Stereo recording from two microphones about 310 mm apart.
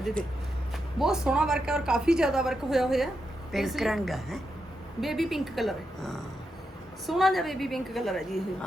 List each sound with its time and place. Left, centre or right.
0.0 s a woman's voice: centre